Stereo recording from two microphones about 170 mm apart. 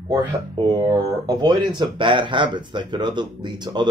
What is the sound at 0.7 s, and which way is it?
Speech, 25° right (ahead or behind).